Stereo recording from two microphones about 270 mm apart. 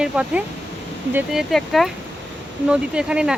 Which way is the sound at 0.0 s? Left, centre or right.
Centre.